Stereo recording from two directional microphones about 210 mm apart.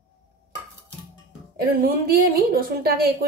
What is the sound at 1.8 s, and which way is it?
Speech, 45° right (ahead or behind).